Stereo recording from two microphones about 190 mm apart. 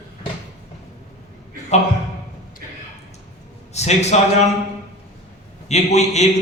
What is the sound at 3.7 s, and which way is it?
Speech, 35° left (ahead or behind).